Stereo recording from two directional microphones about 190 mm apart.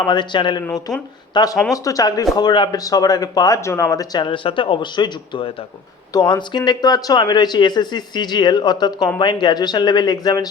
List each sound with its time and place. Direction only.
0.0 s speech: 25° left (ahead or behind)